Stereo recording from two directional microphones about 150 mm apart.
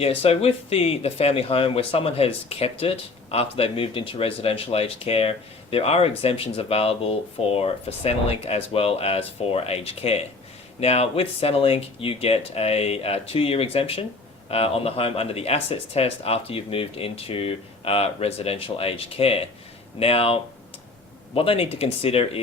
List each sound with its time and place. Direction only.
0.0 s speech: 40° left (ahead or behind)